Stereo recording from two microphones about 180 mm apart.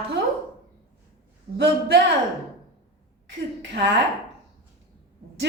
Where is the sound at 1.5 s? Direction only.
70° right (ahead or behind).